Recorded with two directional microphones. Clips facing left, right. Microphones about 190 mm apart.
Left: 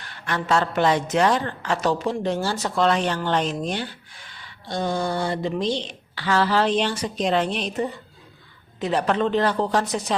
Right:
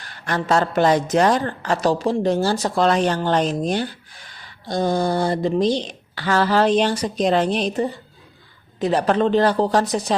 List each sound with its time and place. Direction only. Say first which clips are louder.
0.0 s speech: right 3 dB; 40° right (ahead or behind)